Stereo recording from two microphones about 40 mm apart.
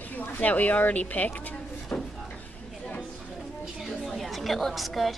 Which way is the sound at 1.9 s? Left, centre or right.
Left.